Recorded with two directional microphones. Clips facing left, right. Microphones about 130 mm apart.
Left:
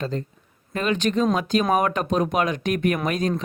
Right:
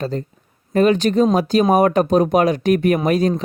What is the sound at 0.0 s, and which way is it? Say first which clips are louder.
Speech: right 4 dB; 35° right (ahead or behind).